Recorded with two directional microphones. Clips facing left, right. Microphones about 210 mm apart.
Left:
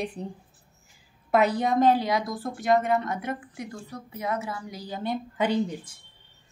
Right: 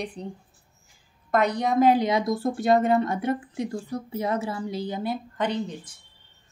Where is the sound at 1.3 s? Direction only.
5° left (ahead or behind).